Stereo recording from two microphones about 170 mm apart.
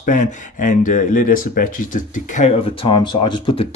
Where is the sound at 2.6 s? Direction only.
30° left (ahead or behind).